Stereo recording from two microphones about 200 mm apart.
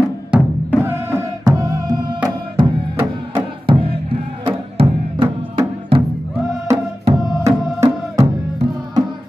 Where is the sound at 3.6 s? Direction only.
25° right (ahead or behind).